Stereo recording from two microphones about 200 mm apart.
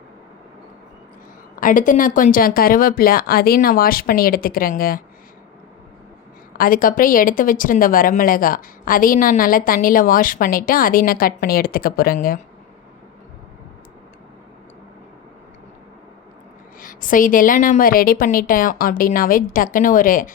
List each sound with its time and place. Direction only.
1.5 s a woman's voice: 40° left (ahead or behind)
6.6 s a woman's voice: 45° left (ahead or behind)
16.8 s a woman's voice: 45° left (ahead or behind)